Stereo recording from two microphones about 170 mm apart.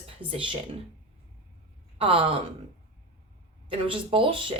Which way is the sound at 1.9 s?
30° right (ahead or behind).